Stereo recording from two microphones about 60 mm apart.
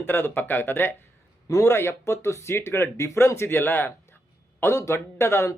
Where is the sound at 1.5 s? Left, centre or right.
Left.